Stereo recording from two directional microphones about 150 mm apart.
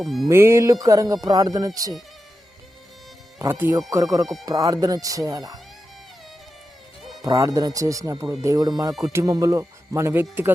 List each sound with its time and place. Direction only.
0.0 s music: centre (ahead or behind)
0.3 s speech: 15° right (ahead or behind)
3.3 s speech: 15° right (ahead or behind)
7.2 s speech: 20° right (ahead or behind)
8.9 s music: centre (ahead or behind)
9.1 s speech: 25° right (ahead or behind)